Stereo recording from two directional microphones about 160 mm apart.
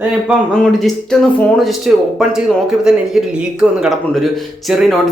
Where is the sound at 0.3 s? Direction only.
Centre (ahead or behind).